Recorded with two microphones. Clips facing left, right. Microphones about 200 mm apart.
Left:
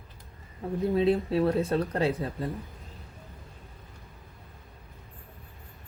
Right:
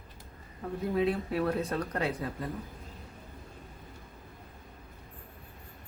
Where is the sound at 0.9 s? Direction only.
30° left (ahead or behind).